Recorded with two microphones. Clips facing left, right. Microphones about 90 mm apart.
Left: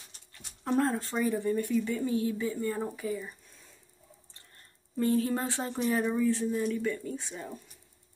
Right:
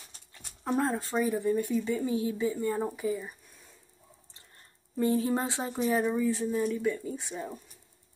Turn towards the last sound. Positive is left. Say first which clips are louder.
# right 2 dB
turn(degrees=-10)  # may be behind; listen again after turning